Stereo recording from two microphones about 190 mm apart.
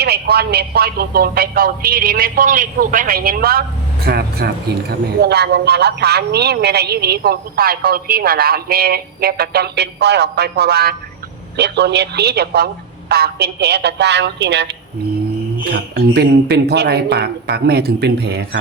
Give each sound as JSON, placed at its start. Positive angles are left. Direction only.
{"t": 0.0, "sound": "a man's voice", "side_deg": -60}